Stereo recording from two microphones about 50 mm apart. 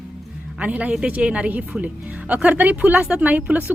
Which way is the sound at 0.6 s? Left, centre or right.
Right.